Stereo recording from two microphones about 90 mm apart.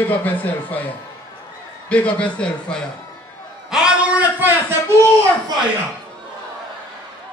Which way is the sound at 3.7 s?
10° right (ahead or behind).